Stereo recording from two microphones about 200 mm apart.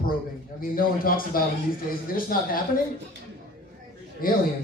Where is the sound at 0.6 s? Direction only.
45° left (ahead or behind).